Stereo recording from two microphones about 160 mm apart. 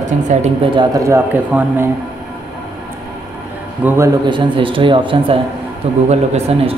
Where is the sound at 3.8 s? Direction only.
15° right (ahead or behind).